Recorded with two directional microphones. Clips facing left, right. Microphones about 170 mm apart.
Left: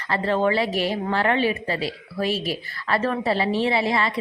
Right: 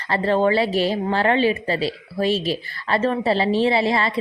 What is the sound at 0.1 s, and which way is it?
A woman's voice, 30° right (ahead or behind).